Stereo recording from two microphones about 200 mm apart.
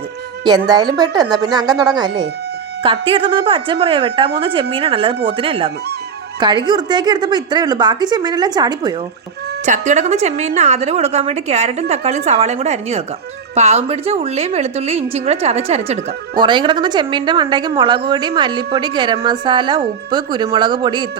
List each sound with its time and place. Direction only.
0.4 s a woman's voice: 20° right (ahead or behind)
2.8 s a woman's voice: 25° right (ahead or behind)
9.6 s a woman's voice: 35° right (ahead or behind)